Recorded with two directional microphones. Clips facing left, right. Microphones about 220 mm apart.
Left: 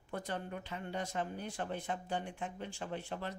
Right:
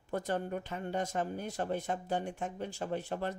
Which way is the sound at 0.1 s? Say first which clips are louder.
Right 6 dB; 45° right (ahead or behind).